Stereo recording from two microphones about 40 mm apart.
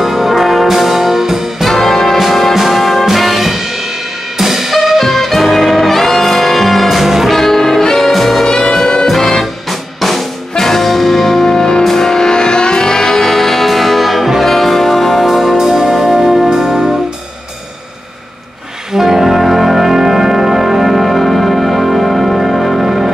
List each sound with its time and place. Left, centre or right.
0.0 s brass instrument: centre
1.7 s brass instrument: centre
4.4 s music: centre
7.3 s brass instrument: centre
8.1 s music: centre
8.5 s music: centre
9.0 s music: centre
18.9 s music: centre